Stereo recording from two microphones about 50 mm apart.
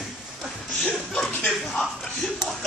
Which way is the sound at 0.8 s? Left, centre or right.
Centre.